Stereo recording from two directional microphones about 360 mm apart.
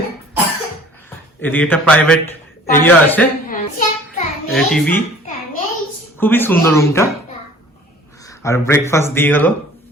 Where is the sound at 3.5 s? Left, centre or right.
Left.